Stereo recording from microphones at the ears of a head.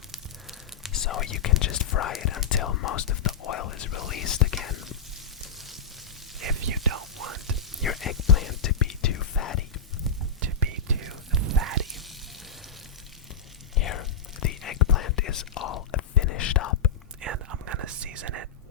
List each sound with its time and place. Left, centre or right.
0.9 s speech: left
6.4 s whispering: right
7.9 s whispering: left
10.4 s whispering: right
13.7 s whispering: left
17.2 s whispering: right